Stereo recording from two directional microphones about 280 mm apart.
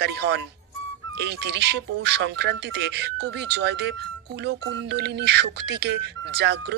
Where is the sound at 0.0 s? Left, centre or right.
Right.